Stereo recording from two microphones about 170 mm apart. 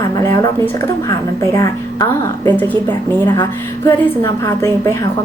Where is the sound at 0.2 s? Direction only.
20° left (ahead or behind).